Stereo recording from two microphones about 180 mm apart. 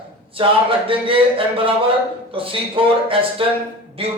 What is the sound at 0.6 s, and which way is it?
A man's voice, 30° right (ahead or behind).